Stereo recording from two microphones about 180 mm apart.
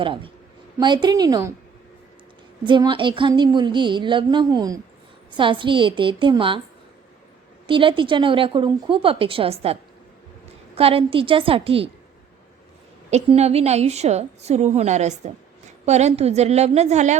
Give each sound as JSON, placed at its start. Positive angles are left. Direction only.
{"t": 0.0, "sound": "a woman's voice", "side_deg": -30}
{"t": 2.6, "sound": "a woman's voice", "side_deg": -25}
{"t": 7.7, "sound": "a woman's voice", "side_deg": -30}
{"t": 10.8, "sound": "a woman's voice", "side_deg": -30}
{"t": 13.1, "sound": "a woman's voice", "side_deg": -35}